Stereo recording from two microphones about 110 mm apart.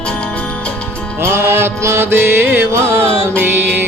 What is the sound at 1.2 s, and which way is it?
Music, 20° right (ahead or behind).